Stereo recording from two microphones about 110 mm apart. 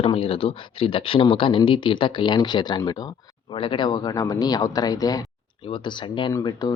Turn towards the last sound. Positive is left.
turn(degrees=40)  # may be behind; listen again after turning